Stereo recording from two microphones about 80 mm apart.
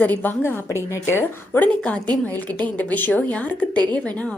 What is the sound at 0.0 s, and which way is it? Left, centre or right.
A woman's voice, left.